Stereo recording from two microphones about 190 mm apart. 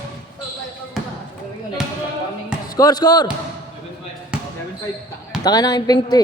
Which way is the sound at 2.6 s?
20° left (ahead or behind).